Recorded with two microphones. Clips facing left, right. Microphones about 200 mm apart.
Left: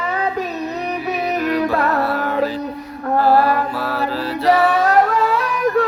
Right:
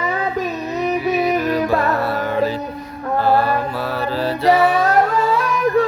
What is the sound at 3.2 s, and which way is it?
Mantra, centre (ahead or behind).